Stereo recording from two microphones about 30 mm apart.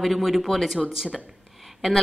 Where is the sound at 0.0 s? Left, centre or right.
Centre.